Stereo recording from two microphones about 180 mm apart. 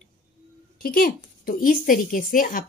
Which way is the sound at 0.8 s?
55° left (ahead or behind).